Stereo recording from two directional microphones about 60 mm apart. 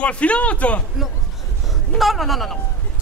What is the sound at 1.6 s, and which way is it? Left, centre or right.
Speech, centre.